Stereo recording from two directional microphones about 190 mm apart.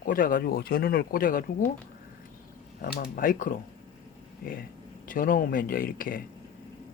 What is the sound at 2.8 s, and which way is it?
Speech, 55° left (ahead or behind).